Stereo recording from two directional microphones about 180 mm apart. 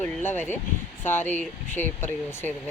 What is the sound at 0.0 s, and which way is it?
Speech, 10° left (ahead or behind).